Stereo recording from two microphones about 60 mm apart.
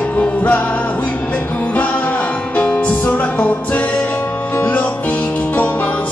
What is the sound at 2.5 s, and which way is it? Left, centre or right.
Music, left.